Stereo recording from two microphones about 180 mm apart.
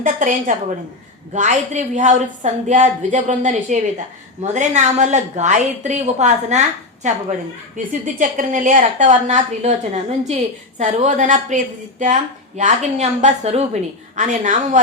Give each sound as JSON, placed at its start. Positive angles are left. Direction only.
{"t": 0.0, "sound": "a woman's voice", "side_deg": -45}